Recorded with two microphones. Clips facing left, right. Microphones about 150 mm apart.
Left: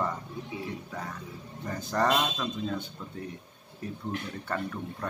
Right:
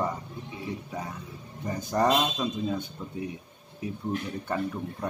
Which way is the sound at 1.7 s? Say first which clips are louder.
Right 2 dB; 15° right (ahead or behind).